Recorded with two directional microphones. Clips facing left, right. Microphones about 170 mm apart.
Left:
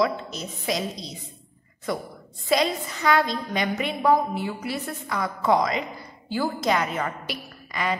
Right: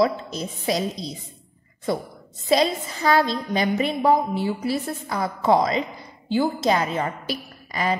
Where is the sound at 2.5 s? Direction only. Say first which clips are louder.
Right 3 dB; 30° right (ahead or behind).